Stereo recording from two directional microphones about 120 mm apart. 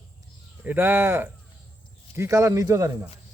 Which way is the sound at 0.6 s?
15° right (ahead or behind).